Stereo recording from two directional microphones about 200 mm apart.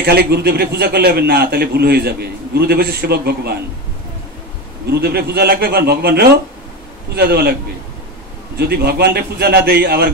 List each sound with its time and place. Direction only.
0.0 s a man's voice: 55° right (ahead or behind)
5.0 s a man's voice: 50° right (ahead or behind)
8.5 s a man's voice: 50° right (ahead or behind)